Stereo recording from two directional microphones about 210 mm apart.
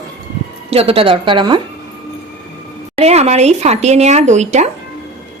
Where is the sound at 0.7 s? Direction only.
25° right (ahead or behind).